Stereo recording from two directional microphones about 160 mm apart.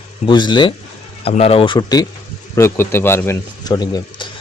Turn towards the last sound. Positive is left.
turn(degrees=25)  # may be behind; listen again after turning